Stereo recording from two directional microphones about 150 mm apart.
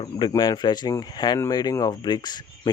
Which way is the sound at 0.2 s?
30° left (ahead or behind).